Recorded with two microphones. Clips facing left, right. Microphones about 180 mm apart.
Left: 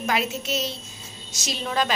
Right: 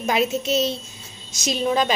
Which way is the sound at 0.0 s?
20° right (ahead or behind).